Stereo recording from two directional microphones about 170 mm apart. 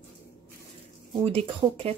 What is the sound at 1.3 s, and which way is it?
Speech, 35° right (ahead or behind).